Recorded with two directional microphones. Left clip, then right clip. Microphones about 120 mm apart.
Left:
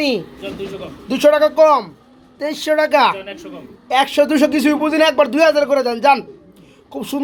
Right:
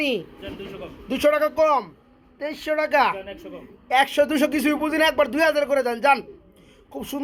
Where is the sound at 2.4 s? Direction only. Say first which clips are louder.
Left 8 dB; 15° left (ahead or behind).